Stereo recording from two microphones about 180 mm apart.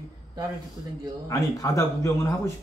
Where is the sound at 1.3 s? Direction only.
20° left (ahead or behind).